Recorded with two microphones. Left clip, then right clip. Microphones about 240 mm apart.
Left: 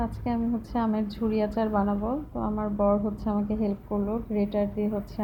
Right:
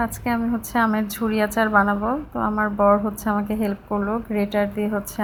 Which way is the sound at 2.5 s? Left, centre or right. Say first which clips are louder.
Right 8 dB; right.